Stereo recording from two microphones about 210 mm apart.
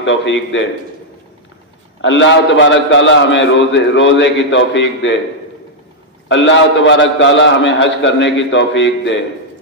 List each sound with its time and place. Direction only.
0.0 s a man's voice: 60° left (ahead or behind)
2.0 s a man's voice: 60° left (ahead or behind)
6.2 s a man's voice: 60° left (ahead or behind)